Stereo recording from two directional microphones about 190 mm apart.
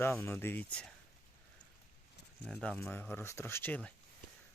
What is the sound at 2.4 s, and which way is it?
Speech, 5° left (ahead or behind).